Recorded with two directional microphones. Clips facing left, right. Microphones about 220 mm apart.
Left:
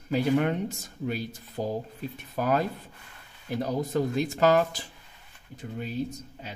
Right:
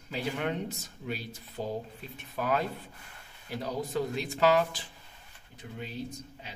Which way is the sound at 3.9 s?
45° left (ahead or behind).